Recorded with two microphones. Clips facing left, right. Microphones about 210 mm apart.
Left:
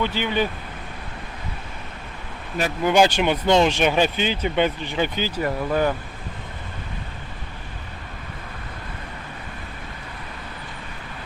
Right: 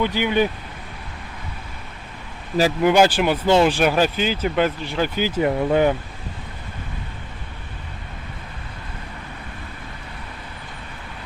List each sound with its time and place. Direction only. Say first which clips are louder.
0.0 s speech: right 3 dB; 10° right (ahead or behind)
2.8 s speech: even; 10° right (ahead or behind)
5.3 s speech: right 5 dB; 20° right (ahead or behind)